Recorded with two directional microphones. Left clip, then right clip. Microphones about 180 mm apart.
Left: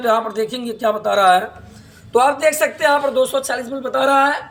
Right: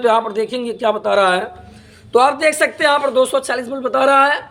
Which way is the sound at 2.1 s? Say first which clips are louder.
Right 1 dB; 50° right (ahead or behind).